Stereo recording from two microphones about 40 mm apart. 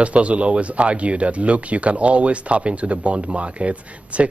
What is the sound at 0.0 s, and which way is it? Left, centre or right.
Speech, right.